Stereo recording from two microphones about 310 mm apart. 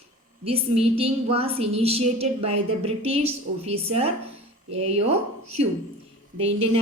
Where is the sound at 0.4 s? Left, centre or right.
Centre.